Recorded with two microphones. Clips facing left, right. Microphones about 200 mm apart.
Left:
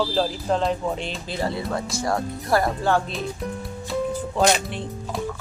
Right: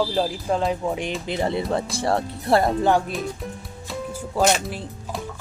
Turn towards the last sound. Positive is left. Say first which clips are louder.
# left 1 dB
turn(degrees=-5)  # may be behind; listen again after turning